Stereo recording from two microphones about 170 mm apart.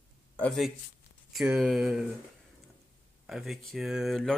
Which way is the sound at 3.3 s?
Centre (ahead or behind).